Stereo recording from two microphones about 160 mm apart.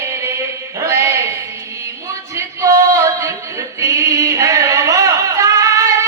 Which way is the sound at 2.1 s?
20° right (ahead or behind).